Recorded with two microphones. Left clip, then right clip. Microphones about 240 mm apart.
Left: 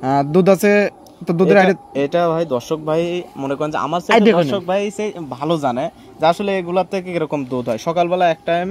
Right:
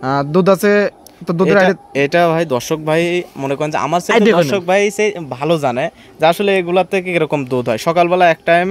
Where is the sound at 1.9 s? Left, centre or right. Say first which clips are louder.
Right 4 dB; right.